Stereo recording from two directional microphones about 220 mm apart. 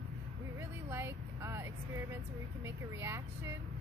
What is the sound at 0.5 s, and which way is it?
Vehicle, 10° right (ahead or behind).